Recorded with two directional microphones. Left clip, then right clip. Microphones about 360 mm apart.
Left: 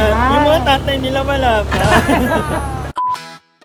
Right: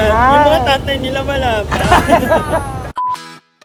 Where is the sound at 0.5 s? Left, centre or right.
Centre.